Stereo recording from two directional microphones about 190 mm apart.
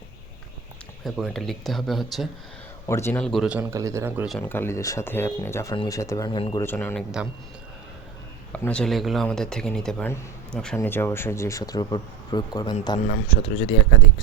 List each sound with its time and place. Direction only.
1.0 s speech: centre (ahead or behind)
2.8 s speech: 15° left (ahead or behind); by 4.3 s 15° right (ahead or behind)
4.3 s speech: 10° left (ahead or behind)
6.6 s speech: 10° left (ahead or behind)
8.5 s speech: 5° left (ahead or behind); by 13.7 s 30° left (ahead or behind)